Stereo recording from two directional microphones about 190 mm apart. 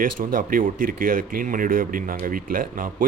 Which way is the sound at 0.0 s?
45° right (ahead or behind).